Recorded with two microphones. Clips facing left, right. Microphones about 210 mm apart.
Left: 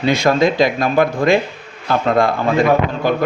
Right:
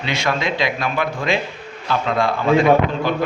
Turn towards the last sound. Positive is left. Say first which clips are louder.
# left 1 dB
turn(degrees=45)  # may be behind; listen again after turning